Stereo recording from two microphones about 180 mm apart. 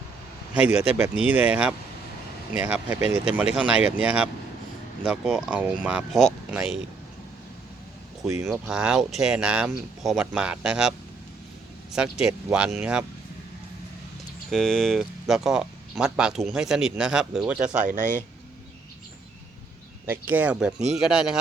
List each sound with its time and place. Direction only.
0.9 s speech: 10° right (ahead or behind)
8.5 s speech: 5° right (ahead or behind)
11.9 s speech: 5° right (ahead or behind)
14.5 s speech: centre (ahead or behind)
17.7 s speech: 45° right (ahead or behind)
20.1 s speech: 10° right (ahead or behind)